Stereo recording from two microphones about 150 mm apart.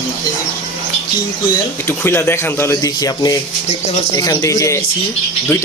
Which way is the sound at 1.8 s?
15° left (ahead or behind).